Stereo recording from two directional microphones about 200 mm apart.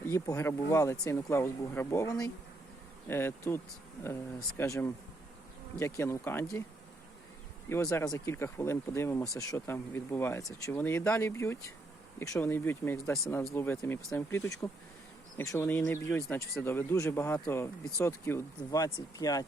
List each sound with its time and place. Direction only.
0.0 s speech: 15° left (ahead or behind)
7.7 s speech: 15° left (ahead or behind)